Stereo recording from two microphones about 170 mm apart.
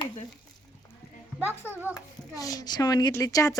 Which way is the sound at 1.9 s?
20° left (ahead or behind).